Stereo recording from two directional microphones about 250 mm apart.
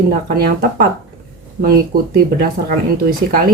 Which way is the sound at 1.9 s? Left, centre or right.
Right.